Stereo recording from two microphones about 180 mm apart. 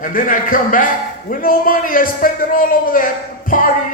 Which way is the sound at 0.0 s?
50° left (ahead or behind).